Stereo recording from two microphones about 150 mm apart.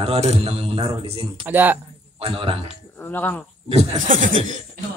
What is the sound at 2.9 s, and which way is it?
Speech, 10° left (ahead or behind).